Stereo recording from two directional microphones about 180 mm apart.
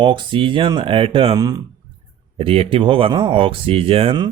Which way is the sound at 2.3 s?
30° right (ahead or behind).